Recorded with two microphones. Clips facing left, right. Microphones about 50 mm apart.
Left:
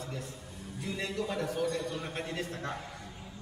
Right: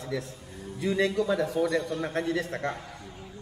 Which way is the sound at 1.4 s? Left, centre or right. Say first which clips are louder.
Right 6 dB; right.